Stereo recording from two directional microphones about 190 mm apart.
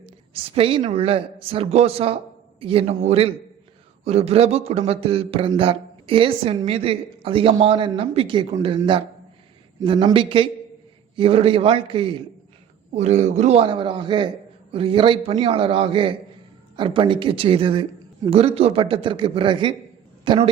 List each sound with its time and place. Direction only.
0.5 s speech: 30° right (ahead or behind)